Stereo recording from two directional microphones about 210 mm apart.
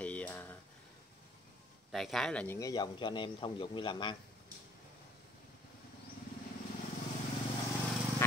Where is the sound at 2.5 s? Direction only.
20° left (ahead or behind).